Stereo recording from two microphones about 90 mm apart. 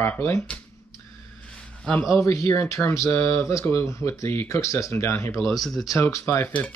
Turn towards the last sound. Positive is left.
turn(degrees=30)  # may be behind; listen again after turning